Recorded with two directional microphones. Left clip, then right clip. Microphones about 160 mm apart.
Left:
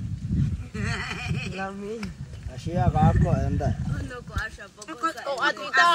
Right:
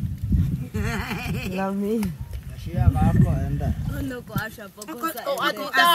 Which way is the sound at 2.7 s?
55° left (ahead or behind).